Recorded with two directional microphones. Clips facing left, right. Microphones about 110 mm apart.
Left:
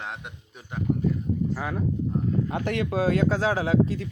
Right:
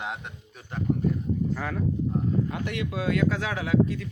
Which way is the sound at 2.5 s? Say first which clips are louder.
Left 5 dB; 35° left (ahead or behind).